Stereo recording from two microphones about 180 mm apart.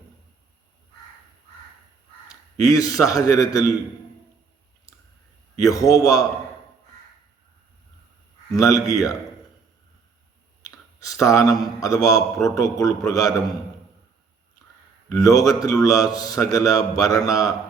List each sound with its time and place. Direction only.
2.3 s a man's voice: 20° left (ahead or behind)
5.5 s a man's voice: 20° left (ahead or behind)
8.5 s a man's voice: 20° left (ahead or behind)
10.6 s a sound: 20° left (ahead or behind)
11.8 s a man's voice: 20° left (ahead or behind)
15.1 s a man's voice: 20° left (ahead or behind)